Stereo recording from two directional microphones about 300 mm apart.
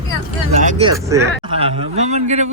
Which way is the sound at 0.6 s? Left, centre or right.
Centre.